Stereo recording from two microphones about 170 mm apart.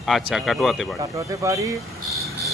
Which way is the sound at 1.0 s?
20° right (ahead or behind).